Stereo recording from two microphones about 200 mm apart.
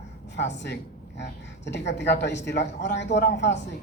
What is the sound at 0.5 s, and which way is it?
A woman's voice, 60° left (ahead or behind).